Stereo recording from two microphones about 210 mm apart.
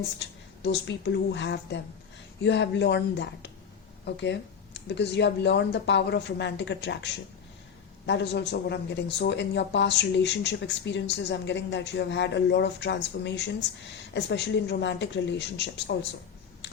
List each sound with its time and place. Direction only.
0.2 s speech: 55° left (ahead or behind)